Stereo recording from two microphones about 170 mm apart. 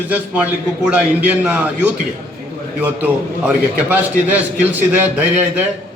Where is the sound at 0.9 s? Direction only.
10° right (ahead or behind).